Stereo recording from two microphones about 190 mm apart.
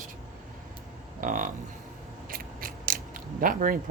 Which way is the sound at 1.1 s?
45° right (ahead or behind).